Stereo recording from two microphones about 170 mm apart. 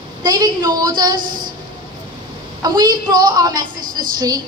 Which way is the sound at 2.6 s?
25° right (ahead or behind).